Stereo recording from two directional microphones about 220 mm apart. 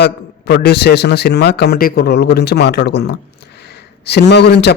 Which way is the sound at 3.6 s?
50° left (ahead or behind).